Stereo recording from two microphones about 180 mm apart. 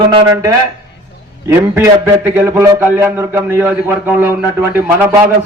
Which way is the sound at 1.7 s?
10° right (ahead or behind).